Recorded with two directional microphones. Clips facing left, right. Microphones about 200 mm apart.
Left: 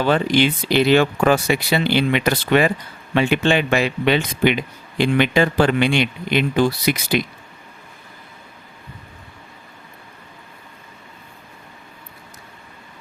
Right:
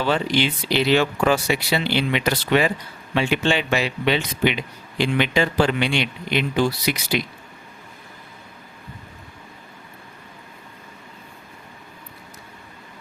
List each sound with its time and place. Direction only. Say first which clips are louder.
0.0 s speech: left 4 dB; 50° left (ahead or behind)